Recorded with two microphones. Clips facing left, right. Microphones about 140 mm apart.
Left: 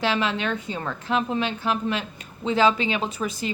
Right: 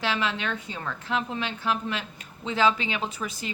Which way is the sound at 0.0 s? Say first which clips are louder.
Left 4 dB; 25° left (ahead or behind).